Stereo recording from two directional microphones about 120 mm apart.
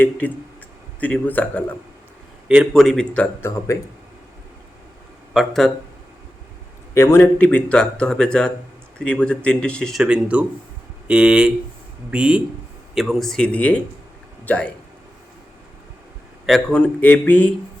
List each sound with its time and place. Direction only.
0.0 s speech: 15° left (ahead or behind)
2.5 s speech: centre (ahead or behind)
3.4 s a man's voice: 25° left (ahead or behind)
5.3 s speech: centre (ahead or behind)
6.9 s speech: 20° left (ahead or behind)
10.0 s speech: 10° right (ahead or behind); by 14.7 s 10° left (ahead or behind)
16.5 s speech: 10° left (ahead or behind)